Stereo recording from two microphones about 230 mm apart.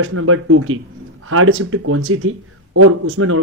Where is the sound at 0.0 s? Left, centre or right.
Right.